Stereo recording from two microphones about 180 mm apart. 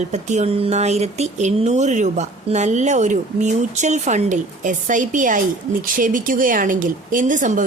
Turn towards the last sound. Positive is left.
turn(degrees=-45)  # may be behind; listen again after turning